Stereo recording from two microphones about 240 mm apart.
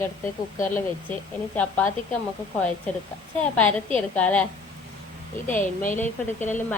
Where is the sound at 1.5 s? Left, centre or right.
Centre.